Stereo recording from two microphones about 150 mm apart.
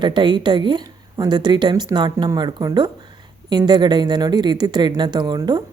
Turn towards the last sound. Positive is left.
turn(degrees=-25)  # may be behind; listen again after turning